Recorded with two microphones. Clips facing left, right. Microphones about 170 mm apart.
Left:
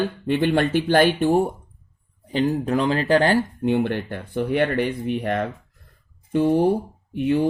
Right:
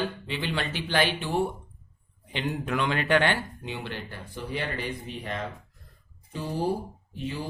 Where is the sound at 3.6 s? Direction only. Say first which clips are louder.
Left 15 dB; 55° left (ahead or behind).